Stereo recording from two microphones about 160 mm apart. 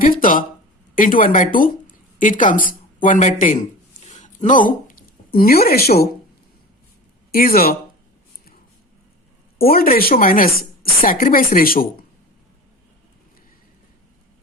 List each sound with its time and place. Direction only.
0.0 s a sound: 60° left (ahead or behind)
0.9 s speech: 60° left (ahead or behind)
5.3 s speech: 70° left (ahead or behind)
7.3 s speech: 65° left (ahead or behind)
9.6 s speech: 70° left (ahead or behind)